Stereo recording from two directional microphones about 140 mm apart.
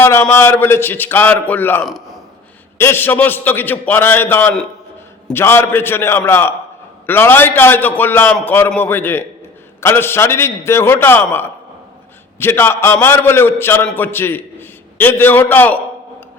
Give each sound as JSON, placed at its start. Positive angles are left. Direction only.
{"t": 0.0, "sound": "a man's voice", "side_deg": 15}